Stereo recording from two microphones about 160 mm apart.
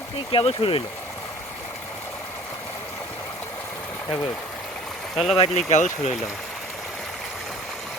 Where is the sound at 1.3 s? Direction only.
15° left (ahead or behind).